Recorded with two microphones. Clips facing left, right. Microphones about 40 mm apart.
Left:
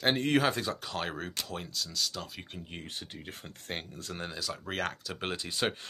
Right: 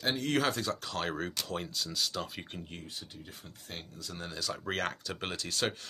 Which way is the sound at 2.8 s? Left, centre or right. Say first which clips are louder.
Left 3 dB; left.